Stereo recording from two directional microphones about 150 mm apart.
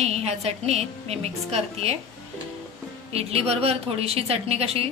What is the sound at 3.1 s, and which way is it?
A woman's voice, 40° right (ahead or behind).